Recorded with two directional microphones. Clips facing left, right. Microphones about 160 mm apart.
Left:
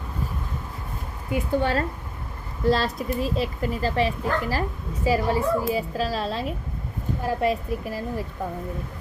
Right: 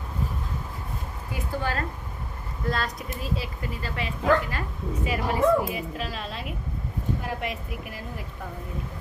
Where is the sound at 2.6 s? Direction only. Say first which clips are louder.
Left 8 dB; 30° left (ahead or behind).